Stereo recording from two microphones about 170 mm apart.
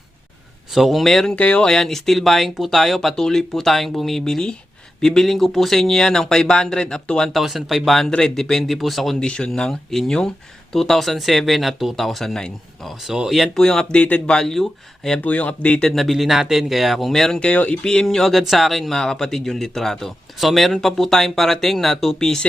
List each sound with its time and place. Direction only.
0.7 s speech: centre (ahead or behind)